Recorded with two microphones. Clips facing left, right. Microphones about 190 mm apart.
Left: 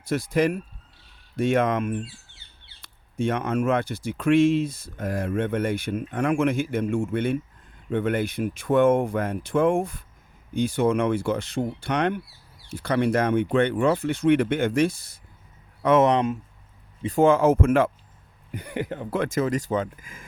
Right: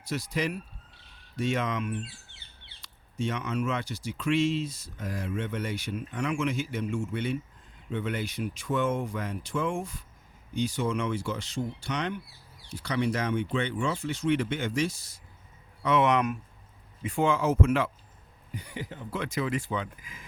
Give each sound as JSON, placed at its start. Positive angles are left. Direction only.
{"t": 0.0, "sound": "speech", "side_deg": 55}
{"t": 16.0, "sound": "speech", "side_deg": 30}
{"t": 17.0, "sound": "speech", "side_deg": 40}